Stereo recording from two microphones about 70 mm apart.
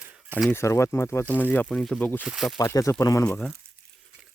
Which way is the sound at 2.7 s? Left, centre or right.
Left.